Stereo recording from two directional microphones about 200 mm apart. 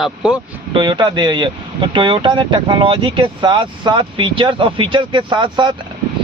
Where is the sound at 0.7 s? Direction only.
20° right (ahead or behind).